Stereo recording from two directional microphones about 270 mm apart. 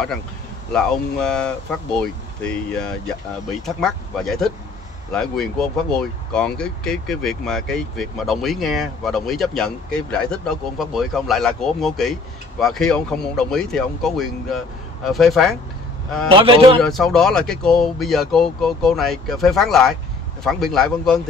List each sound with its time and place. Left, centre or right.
0.7 s speech: centre
16.3 s speech: centre
16.8 s speech: centre